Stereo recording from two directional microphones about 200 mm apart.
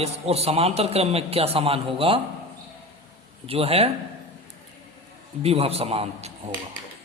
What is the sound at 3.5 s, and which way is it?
Speech, 30° right (ahead or behind).